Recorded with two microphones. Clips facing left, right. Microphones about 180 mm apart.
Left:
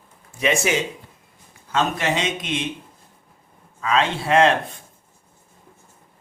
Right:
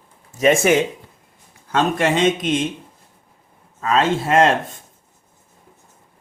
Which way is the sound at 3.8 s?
45° right (ahead or behind).